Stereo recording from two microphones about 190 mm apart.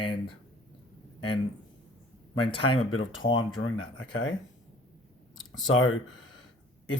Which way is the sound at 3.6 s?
90° left.